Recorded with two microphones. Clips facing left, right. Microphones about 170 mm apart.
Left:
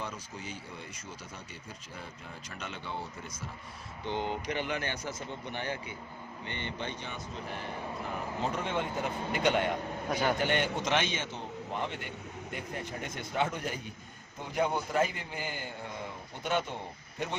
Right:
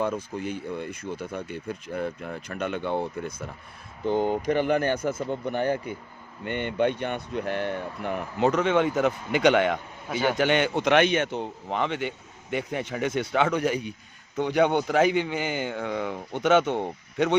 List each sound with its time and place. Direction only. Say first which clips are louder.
0.0 s speech: right 12 dB; 55° right (ahead or behind)
4.1 s speech: right 10 dB; 45° right (ahead or behind); by 9.7 s 90° right
10.1 s a man's voice: right 4 dB; centre (ahead or behind)
10.3 s a man's voice: right 7 dB; 85° right